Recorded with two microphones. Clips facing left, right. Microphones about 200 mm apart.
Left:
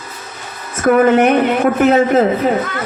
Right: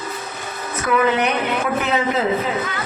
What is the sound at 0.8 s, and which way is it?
A man's voice, 50° left (ahead or behind).